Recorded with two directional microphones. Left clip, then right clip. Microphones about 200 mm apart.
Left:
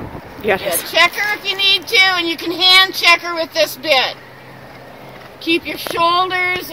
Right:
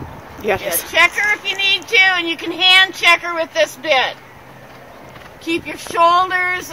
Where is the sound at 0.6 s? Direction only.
35° right (ahead or behind).